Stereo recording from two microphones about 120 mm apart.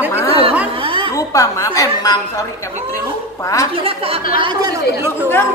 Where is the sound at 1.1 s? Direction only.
25° left (ahead or behind).